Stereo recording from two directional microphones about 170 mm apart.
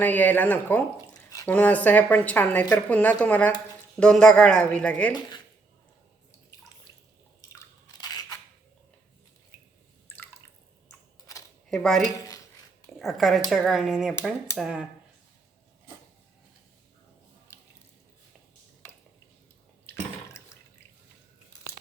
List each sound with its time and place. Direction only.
0.0 s a woman's voice: 10° left (ahead or behind)
1.1 s drip: 20° left (ahead or behind)
1.5 s a woman's voice: 10° left (ahead or behind)
7.6 s scissors: 20° left (ahead or behind)
11.7 s a woman's voice: 5° left (ahead or behind)
17.5 s drip: 15° left (ahead or behind)
19.9 s water: 15° left (ahead or behind)